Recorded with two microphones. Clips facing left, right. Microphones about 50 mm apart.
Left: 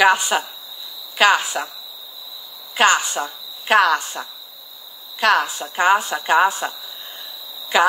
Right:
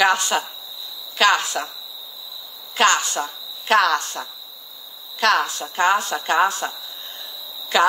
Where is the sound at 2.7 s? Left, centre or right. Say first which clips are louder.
Left 2 dB; centre.